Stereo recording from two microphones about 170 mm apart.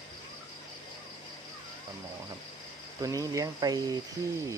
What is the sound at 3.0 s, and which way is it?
Speech, 20° right (ahead or behind).